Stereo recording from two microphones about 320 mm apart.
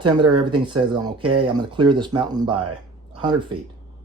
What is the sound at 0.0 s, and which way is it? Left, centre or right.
Speech, centre.